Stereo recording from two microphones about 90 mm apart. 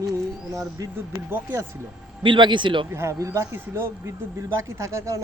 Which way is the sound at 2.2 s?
60° right (ahead or behind).